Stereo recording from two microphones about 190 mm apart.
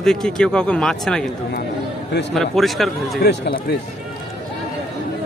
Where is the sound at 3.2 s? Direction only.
50° left (ahead or behind).